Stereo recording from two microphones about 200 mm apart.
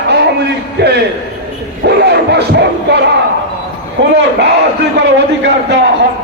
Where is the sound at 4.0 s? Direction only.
60° right (ahead or behind).